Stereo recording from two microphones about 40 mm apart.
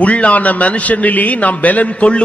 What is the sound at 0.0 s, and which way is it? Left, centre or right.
A man's voice, left.